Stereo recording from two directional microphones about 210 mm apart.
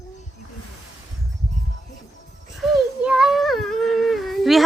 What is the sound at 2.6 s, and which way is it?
Humming, centre (ahead or behind).